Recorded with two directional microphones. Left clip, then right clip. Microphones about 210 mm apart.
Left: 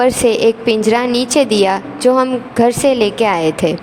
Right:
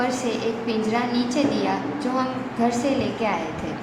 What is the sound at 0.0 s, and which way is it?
A woman's voice, 50° left (ahead or behind).